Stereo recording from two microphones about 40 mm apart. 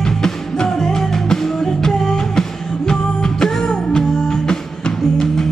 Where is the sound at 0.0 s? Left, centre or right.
Centre.